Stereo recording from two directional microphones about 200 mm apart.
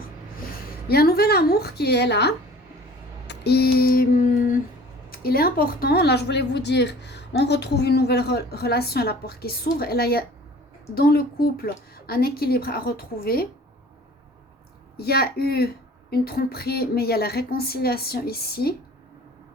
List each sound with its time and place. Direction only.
0.9 s speech: 50° left (ahead or behind)
3.2 s a sound: 55° left (ahead or behind)
5.1 s speech: 50° left (ahead or behind)
14.9 s speech: 50° left (ahead or behind)